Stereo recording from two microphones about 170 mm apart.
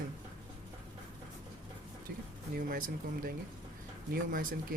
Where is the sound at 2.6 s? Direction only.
55° right (ahead or behind).